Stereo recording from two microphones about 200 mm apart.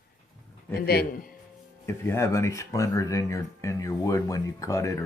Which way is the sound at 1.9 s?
10° left (ahead or behind).